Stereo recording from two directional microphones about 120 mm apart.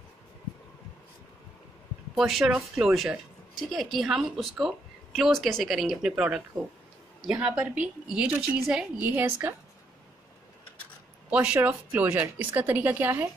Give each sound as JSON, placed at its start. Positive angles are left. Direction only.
{"t": 2.1, "sound": "a woman's voice", "side_deg": 0}
{"t": 11.2, "sound": "a woman's voice", "side_deg": -10}